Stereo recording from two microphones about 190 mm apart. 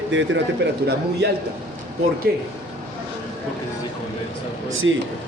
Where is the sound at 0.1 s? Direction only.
70° right (ahead or behind).